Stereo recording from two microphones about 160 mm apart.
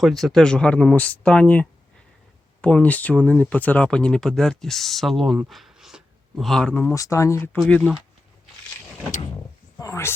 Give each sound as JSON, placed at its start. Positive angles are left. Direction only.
{"t": 0.0, "sound": "speech", "side_deg": 0}
{"t": 6.9, "sound": "speech", "side_deg": 20}
{"t": 7.7, "sound": "speech", "side_deg": 0}
{"t": 9.7, "sound": "speech", "side_deg": 20}